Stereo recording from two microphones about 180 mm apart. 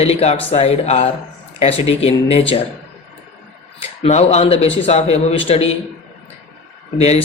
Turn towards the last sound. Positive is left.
turn(degrees=35)  # may be behind; listen again after turning